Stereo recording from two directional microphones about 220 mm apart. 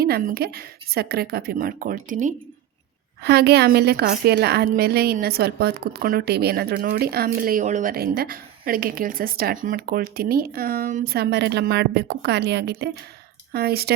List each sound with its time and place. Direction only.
0.0 s a woman's voice: 45° right (ahead or behind)
3.2 s a woman's voice: 50° right (ahead or behind)